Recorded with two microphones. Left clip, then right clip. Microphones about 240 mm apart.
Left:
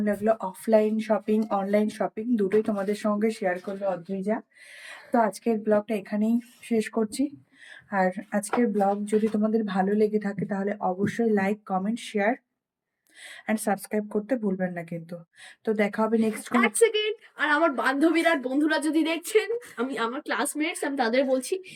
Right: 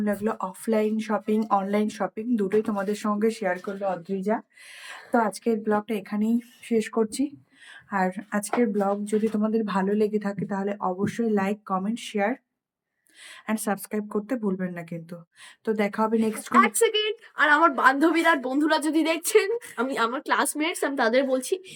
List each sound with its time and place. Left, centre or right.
0.0 s speech: centre
4.9 s a sound: centre
5.3 s speech: centre
13.5 s speech: centre
16.5 s a woman's voice: centre